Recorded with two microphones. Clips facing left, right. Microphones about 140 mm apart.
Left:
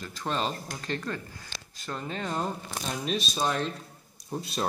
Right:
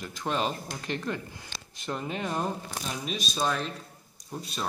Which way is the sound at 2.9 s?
Centre (ahead or behind).